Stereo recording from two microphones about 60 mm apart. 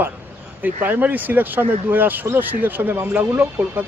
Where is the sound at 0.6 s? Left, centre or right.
Right.